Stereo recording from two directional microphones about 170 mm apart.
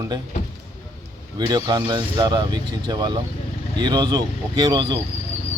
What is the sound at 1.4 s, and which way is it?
Speech, 25° right (ahead or behind).